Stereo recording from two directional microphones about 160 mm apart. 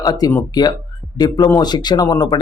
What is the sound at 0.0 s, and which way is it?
Speech, 25° left (ahead or behind).